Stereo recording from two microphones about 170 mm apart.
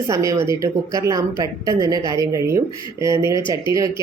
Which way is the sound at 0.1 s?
20° right (ahead or behind).